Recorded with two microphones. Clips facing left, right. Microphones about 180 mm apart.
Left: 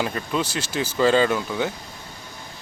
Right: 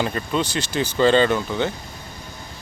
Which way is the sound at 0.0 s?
5° left (ahead or behind).